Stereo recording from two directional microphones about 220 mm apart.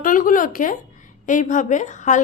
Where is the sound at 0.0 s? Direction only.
35° left (ahead or behind).